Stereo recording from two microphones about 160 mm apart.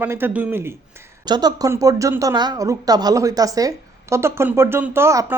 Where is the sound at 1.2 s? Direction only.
25° right (ahead or behind).